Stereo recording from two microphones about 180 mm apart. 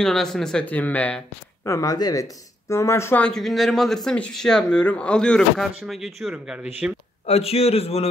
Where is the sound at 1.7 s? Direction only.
20° left (ahead or behind); by 7.0 s 5° right (ahead or behind).